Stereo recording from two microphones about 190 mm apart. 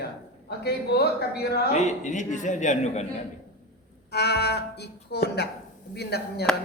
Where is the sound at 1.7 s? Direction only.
40° left (ahead or behind).